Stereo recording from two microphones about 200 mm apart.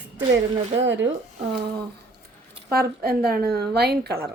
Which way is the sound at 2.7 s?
50° right (ahead or behind).